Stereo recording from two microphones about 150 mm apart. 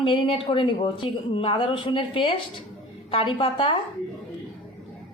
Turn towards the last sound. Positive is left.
turn(degrees=35)  # may be behind; listen again after turning